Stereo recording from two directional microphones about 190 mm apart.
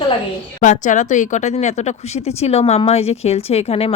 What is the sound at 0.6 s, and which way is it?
Speech, 40° left (ahead or behind).